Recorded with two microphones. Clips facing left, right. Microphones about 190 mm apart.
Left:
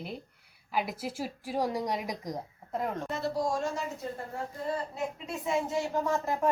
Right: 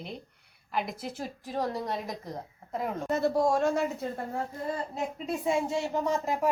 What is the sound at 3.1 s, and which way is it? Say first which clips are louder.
Speech: right 9 dB; 50° right (ahead or behind).